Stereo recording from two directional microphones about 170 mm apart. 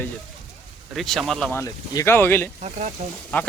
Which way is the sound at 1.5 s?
20° left (ahead or behind).